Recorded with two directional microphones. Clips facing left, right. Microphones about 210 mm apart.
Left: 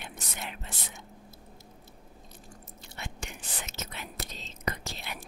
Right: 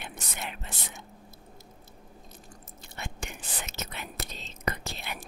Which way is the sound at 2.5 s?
45° right (ahead or behind).